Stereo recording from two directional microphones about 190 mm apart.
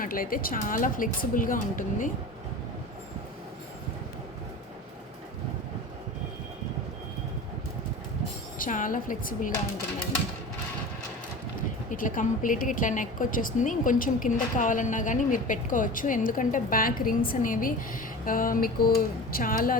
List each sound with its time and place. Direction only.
0.0 s a woman's voice: 50° left (ahead or behind)
8.5 s a woman's voice: 45° left (ahead or behind)
11.9 s a woman's voice: 45° left (ahead or behind)